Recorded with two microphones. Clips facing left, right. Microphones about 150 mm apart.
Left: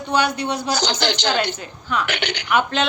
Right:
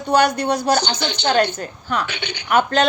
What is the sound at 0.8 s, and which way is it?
Speech, 90° left.